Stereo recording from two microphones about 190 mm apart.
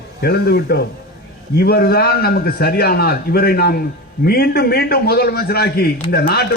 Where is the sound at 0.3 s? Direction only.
60° left (ahead or behind).